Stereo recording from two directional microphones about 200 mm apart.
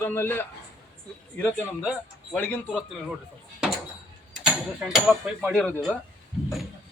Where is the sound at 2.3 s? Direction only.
5° left (ahead or behind).